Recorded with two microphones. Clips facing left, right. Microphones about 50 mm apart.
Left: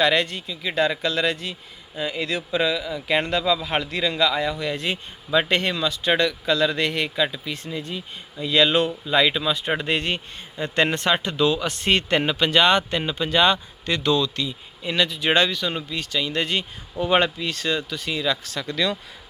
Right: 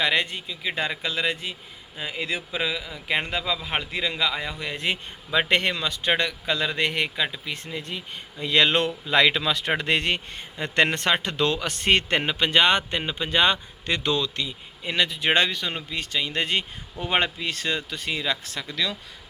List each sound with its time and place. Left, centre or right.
0.0 s a man's voice: centre
4.6 s speech: right
9.0 s speech: right
17.0 s speech: centre
18.7 s speech: centre